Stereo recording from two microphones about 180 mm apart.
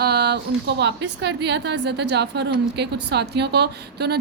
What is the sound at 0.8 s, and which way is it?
A woman's voice, 70° right (ahead or behind).